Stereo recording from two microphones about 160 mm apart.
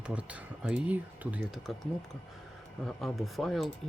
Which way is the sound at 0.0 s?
5° right (ahead or behind).